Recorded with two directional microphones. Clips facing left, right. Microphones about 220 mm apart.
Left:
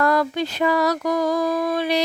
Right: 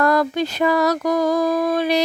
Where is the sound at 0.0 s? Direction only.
45° right (ahead or behind).